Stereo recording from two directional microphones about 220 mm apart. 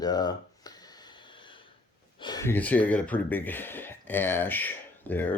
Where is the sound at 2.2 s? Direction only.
15° left (ahead or behind).